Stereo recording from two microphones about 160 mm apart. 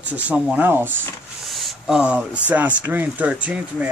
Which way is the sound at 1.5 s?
Centre (ahead or behind).